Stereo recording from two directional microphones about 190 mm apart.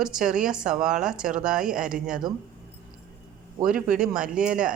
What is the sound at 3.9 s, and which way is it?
Speech, 5° right (ahead or behind).